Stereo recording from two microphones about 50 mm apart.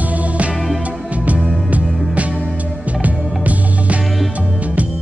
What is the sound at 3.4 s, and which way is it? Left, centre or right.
Music, right.